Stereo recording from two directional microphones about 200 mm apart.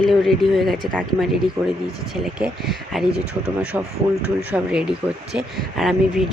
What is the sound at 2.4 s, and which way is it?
Speech, centre (ahead or behind).